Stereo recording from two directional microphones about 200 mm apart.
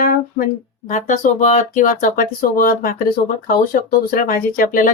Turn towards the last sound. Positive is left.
turn(degrees=45)  # may be behind; listen again after turning